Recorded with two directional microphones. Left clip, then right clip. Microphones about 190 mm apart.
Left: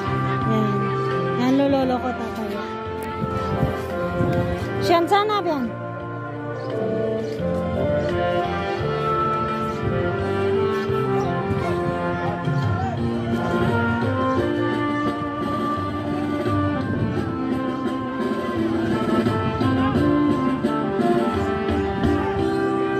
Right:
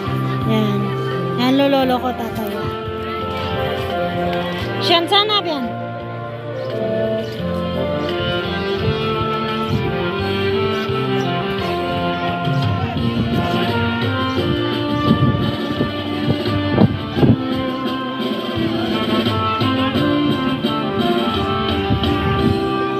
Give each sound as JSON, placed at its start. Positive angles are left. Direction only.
{"t": 1.4, "sound": "speech", "side_deg": 0}
{"t": 4.8, "sound": "speech", "side_deg": 15}
{"t": 19.0, "sound": "music", "side_deg": -10}